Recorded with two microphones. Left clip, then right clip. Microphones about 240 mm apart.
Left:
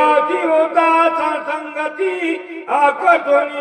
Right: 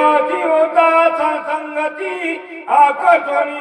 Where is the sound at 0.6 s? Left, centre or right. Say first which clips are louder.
Right 2 dB; left.